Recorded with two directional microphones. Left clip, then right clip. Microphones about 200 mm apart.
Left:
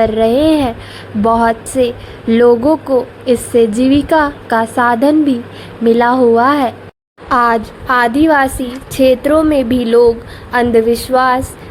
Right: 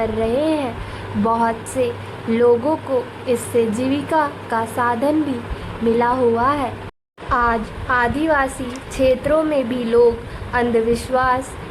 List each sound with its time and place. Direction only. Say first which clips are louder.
0.0 s a woman's voice: left 8 dB; 35° left (ahead or behind)